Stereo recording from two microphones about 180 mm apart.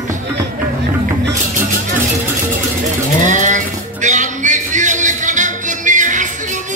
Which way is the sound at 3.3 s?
45° right (ahead or behind).